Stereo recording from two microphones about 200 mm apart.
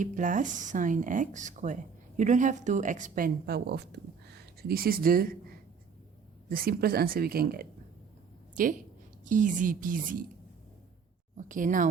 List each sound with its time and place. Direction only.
0.0 s speech: 40° right (ahead or behind)
6.5 s speech: 50° right (ahead or behind)
9.2 s speech: 40° right (ahead or behind)
11.3 s speech: 40° right (ahead or behind)